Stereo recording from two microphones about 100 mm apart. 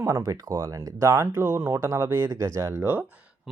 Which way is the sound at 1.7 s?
35° right (ahead or behind).